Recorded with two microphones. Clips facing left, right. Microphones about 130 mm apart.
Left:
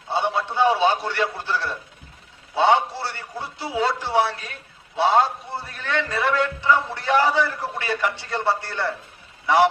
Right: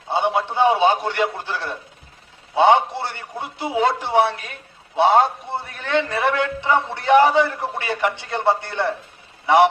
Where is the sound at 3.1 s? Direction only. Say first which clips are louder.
Right 2 dB; 20° right (ahead or behind).